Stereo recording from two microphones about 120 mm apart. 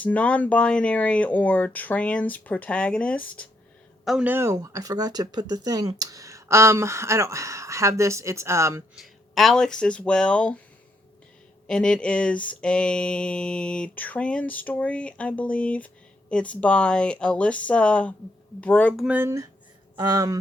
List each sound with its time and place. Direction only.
0.0 s a sound: 10° left (ahead or behind)
4.0 s speech: 5° right (ahead or behind)
4.3 s speech: 20° right (ahead or behind)
4.5 s speech: 30° right (ahead or behind)
9.0 s speech: centre (ahead or behind)
11.7 s a sound: 5° left (ahead or behind)
19.0 s speech: 15° right (ahead or behind)
20.0 s speech: 30° right (ahead or behind)